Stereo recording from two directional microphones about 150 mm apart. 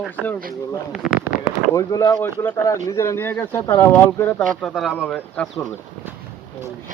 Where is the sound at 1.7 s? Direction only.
20° left (ahead or behind).